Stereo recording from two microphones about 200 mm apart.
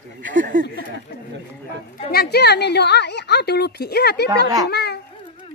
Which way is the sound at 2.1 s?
55° left (ahead or behind).